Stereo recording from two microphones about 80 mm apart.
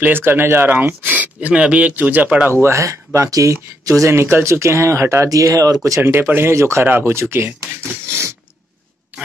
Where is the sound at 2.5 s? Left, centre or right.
Right.